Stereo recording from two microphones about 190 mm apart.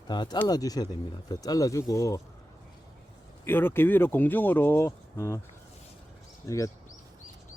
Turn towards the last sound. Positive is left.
turn(degrees=15)  # may be behind; listen again after turning